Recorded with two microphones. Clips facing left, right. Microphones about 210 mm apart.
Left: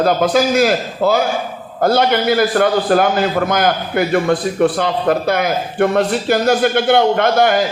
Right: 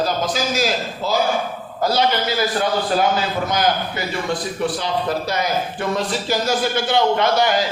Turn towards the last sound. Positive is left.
turn(degrees=55)  # may be behind; listen again after turning